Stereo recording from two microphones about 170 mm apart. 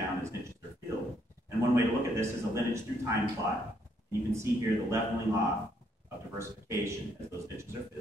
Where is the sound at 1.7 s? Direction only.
15° right (ahead or behind).